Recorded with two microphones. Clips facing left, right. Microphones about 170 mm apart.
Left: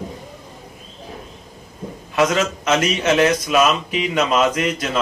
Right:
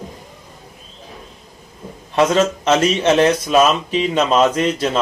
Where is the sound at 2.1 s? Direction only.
30° right (ahead or behind).